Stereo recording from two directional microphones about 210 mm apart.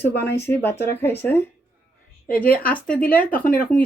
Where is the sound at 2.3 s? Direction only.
45° left (ahead or behind).